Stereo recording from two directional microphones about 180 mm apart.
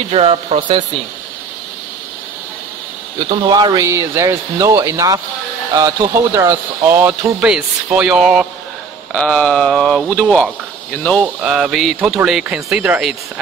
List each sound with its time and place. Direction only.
0.1 s speech: 35° right (ahead or behind)
3.4 s speech: 20° right (ahead or behind); by 8.5 s 5° right (ahead or behind)
9.1 s speech: 5° left (ahead or behind)